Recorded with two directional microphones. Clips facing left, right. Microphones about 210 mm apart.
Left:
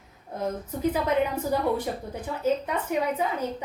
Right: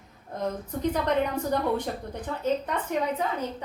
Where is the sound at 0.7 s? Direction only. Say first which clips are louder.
Left 1 dB; 5° left (ahead or behind).